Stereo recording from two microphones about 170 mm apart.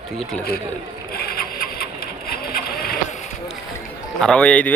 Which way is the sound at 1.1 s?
60° left (ahead or behind).